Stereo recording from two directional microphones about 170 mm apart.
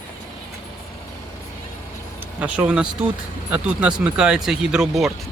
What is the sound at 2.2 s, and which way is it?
Speech, 10° right (ahead or behind).